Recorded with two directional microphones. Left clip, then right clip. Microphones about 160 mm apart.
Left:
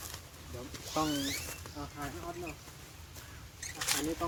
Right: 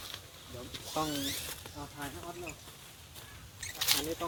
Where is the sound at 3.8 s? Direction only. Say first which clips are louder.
Right 3 dB; 5° right (ahead or behind).